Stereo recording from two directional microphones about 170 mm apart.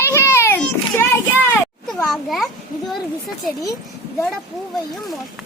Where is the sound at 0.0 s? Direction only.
15° left (ahead or behind).